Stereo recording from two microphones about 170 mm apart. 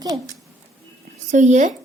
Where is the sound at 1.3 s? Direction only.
45° right (ahead or behind).